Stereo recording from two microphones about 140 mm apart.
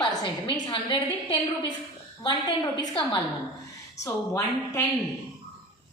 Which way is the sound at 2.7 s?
30° left (ahead or behind).